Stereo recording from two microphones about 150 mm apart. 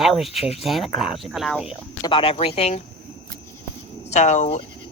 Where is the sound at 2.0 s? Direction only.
35° left (ahead or behind).